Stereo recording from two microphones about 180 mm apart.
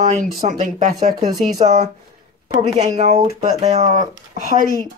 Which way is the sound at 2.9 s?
40° right (ahead or behind).